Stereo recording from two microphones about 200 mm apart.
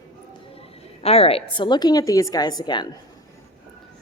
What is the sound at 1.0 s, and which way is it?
A woman's voice, 30° left (ahead or behind).